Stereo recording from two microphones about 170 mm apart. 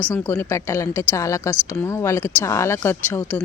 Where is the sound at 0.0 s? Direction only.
10° left (ahead or behind).